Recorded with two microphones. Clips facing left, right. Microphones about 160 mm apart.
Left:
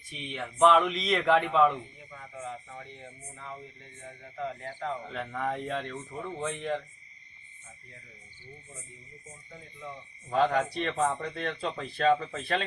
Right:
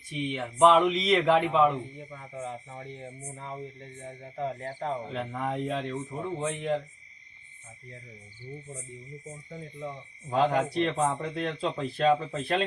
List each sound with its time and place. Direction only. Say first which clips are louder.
0.3 s speech: right 2 dB; 15° right (ahead or behind)
2.0 s speech: right 4 dB; 30° right (ahead or behind)
5.0 s speech: right 1 dB; 20° right (ahead or behind)
10.2 s speech: right 1 dB; 20° right (ahead or behind)